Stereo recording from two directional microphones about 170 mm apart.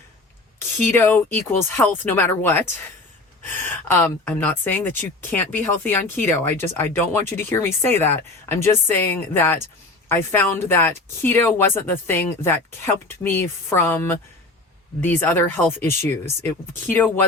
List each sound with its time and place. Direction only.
0.9 s speech: 10° left (ahead or behind)